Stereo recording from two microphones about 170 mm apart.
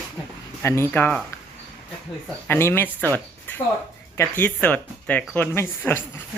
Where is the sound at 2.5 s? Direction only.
15° left (ahead or behind).